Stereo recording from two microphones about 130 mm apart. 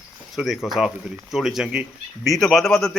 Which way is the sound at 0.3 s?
Centre (ahead or behind).